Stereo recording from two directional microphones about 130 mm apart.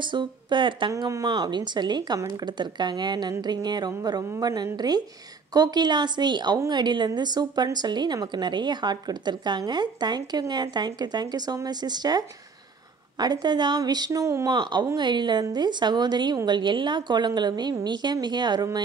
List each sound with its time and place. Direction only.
0.0 s a woman's voice: 35° right (ahead or behind)